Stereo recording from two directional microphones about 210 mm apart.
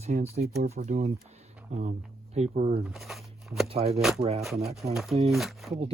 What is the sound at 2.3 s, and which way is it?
Speech, 30° right (ahead or behind).